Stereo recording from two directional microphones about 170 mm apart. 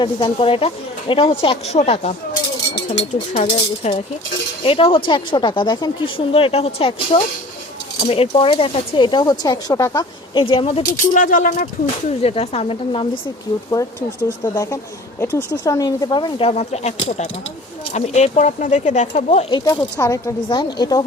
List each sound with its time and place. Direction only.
0.0 s speech: 30° left (ahead or behind)
3.8 s speech: 40° left (ahead or behind); by 10.1 s 20° left (ahead or behind)
10.3 s speech: 30° left (ahead or behind)
11.1 s speech: 50° left (ahead or behind)
12.2 s speech: 35° left (ahead or behind)
14.3 s speech: 20° left (ahead or behind); by 19.5 s 40° left (ahead or behind)
19.5 s speech: 20° left (ahead or behind)